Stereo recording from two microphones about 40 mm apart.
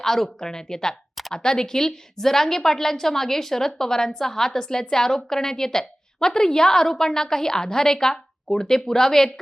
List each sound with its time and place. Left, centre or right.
0.0 s a woman's voice: centre